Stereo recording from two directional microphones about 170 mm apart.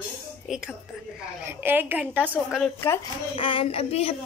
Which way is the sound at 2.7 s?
15° left (ahead or behind).